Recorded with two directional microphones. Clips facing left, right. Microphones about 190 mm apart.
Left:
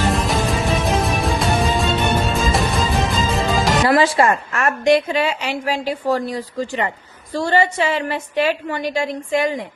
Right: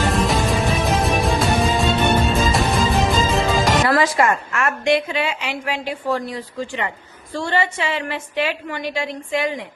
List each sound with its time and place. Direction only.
0.1 s music: centre (ahead or behind)
3.8 s a woman's voice: 30° left (ahead or behind)